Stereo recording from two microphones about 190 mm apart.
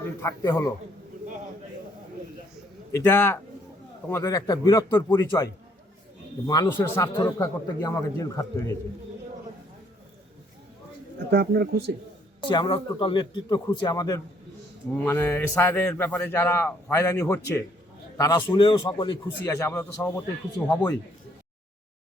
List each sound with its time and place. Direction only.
0.2 s a man's voice: 15° left (ahead or behind)
2.9 s a man's voice: 10° left (ahead or behind)
6.5 s a man's voice: 15° left (ahead or behind)
11.3 s speech: 55° right (ahead or behind)
12.5 s a man's voice: 25° left (ahead or behind)
18.2 s a man's voice: 20° left (ahead or behind)